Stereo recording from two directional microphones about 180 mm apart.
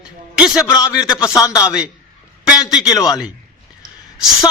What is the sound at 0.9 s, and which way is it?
Speech, 5° right (ahead or behind).